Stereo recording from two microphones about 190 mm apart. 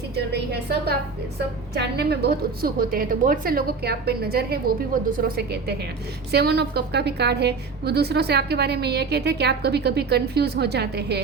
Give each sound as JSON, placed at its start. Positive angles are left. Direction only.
{"t": 0.3, "sound": "a woman's voice", "side_deg": -60}